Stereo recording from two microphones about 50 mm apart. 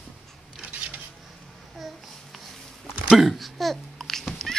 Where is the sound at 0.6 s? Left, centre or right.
Right.